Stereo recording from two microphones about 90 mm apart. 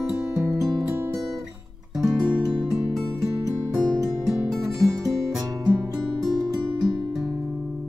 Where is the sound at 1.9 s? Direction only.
5° right (ahead or behind).